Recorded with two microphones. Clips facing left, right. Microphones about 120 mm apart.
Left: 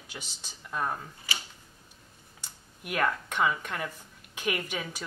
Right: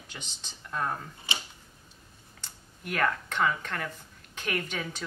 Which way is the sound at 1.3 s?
25° right (ahead or behind).